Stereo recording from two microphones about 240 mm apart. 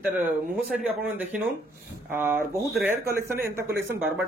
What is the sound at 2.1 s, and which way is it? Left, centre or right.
Speech, centre.